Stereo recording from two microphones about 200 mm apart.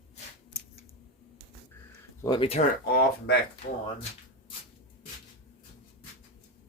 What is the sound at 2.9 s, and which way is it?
Speech, 50° left (ahead or behind).